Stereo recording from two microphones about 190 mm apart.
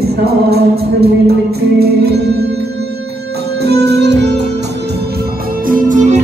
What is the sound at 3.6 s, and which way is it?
Music, 60° right (ahead or behind).